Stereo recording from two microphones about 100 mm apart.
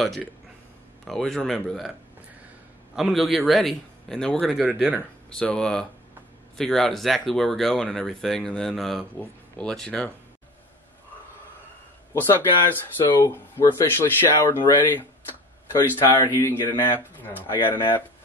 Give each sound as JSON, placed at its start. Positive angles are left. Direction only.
{"t": 1.0, "sound": "speech", "side_deg": 5}
{"t": 3.0, "sound": "speech", "side_deg": 0}
{"t": 4.6, "sound": "speech", "side_deg": -15}
{"t": 5.3, "sound": "speech", "side_deg": 10}
{"t": 12.1, "sound": "speech", "side_deg": 20}